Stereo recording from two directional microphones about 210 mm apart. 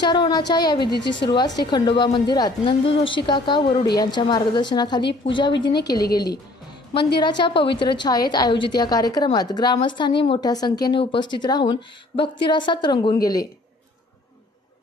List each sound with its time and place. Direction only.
0.0 s a woman's voice: 20° left (ahead or behind)
0.8 s a woman's voice: 55° left (ahead or behind)
1.3 s a woman's voice: 20° left (ahead or behind)
7.2 s a woman's voice: 20° left (ahead or behind)